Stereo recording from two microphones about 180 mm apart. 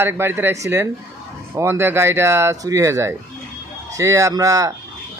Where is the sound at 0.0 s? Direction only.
15° right (ahead or behind).